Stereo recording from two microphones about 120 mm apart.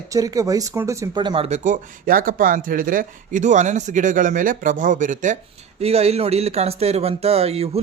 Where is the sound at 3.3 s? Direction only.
90° right.